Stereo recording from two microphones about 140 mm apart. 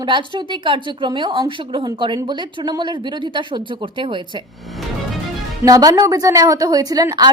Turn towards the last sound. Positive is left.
turn(degrees=-30)  # may be behind; listen again after turning